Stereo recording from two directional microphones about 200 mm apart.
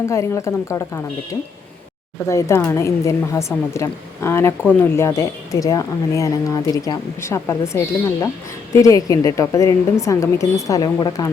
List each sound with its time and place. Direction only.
0.0 s speech: 15° left (ahead or behind)
2.2 s speech: 15° left (ahead or behind)